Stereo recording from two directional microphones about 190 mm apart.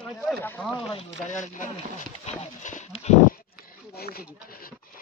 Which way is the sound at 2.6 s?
40° left (ahead or behind).